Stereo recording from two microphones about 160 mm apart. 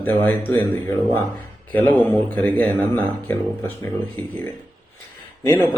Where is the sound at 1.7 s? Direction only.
10° left (ahead or behind).